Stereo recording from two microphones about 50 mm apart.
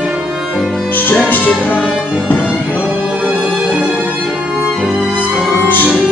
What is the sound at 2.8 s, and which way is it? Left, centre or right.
Music, right.